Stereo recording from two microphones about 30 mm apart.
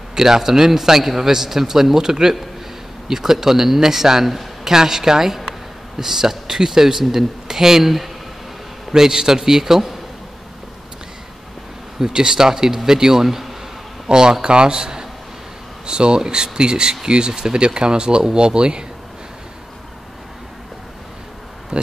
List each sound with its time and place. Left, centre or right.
0.1 s a man's voice: centre
8.9 s a man's voice: centre
12.1 s speech: right
14.0 s speech: right